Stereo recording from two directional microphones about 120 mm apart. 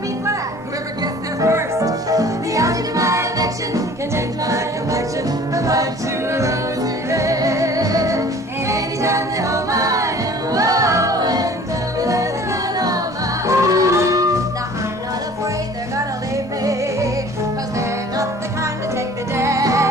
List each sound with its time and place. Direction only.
1.0 s music: 25° right (ahead or behind)
16.6 s music: 25° right (ahead or behind)